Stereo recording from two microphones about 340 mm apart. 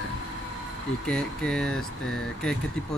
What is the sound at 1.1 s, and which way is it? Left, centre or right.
Speech, centre.